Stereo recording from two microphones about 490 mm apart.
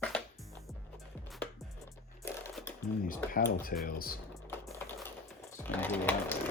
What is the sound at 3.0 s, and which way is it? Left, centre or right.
Speech, centre.